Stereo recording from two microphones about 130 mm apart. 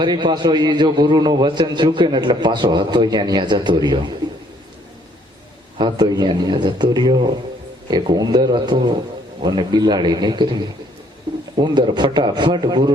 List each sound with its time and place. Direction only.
0.0 s a man's voice: 35° right (ahead or behind)
5.7 s a man's voice: 35° right (ahead or behind)
11.3 s a sound: 35° right (ahead or behind)
11.6 s a man's voice: 35° right (ahead or behind)